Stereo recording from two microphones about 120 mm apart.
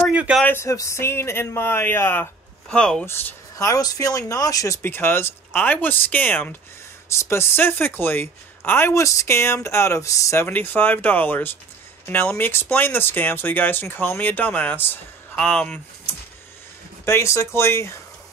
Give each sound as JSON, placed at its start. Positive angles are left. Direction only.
{"t": 0.1, "sound": "a sound", "side_deg": -10}
{"t": 0.4, "sound": "speech", "side_deg": 20}
{"t": 2.7, "sound": "speech", "side_deg": 5}
{"t": 3.1, "sound": "speech", "side_deg": 20}
{"t": 4.8, "sound": "speech", "side_deg": 20}
{"t": 17.0, "sound": "speech", "side_deg": 25}